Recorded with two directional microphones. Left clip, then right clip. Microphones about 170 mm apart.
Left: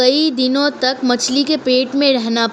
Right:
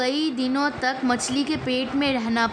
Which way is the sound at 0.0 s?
30° left (ahead or behind).